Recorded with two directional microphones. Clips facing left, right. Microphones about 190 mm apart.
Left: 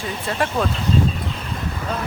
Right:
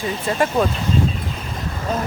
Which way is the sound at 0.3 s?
5° right (ahead or behind).